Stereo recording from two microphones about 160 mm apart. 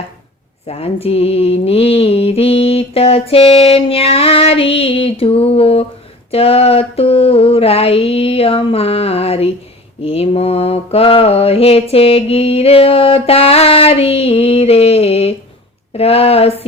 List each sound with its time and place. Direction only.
0.7 s mantra: 40° left (ahead or behind)